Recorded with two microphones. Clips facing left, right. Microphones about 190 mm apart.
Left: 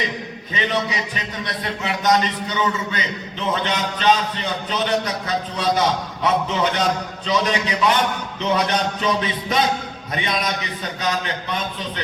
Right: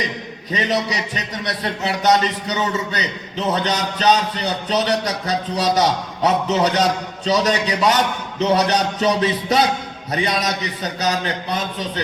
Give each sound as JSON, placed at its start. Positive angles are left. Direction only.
{"t": 0.5, "sound": "a man's voice", "side_deg": -40}